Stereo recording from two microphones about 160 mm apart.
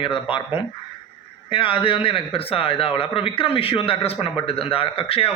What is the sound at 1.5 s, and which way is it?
A man's voice, 35° left (ahead or behind).